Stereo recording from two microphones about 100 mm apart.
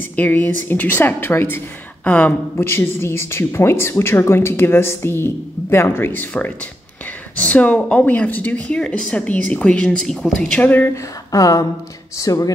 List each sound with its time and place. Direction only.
0.1 s speech: 15° left (ahead or behind)
7.3 s speech: 15° left (ahead or behind)
10.6 s speech: 15° left (ahead or behind)
11.3 s speech: 35° left (ahead or behind)